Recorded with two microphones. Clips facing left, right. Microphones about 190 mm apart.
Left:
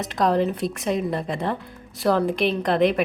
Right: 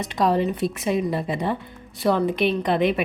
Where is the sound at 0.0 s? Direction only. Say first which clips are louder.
Even; centre (ahead or behind).